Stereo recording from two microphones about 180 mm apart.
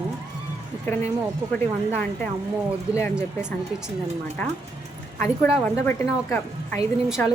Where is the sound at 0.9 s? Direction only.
10° left (ahead or behind).